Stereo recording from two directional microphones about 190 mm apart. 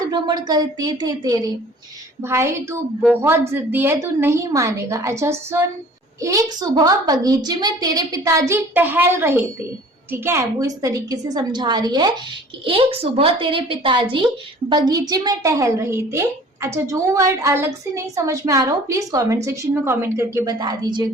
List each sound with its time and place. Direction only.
0.1 s a woman's voice: 20° right (ahead or behind)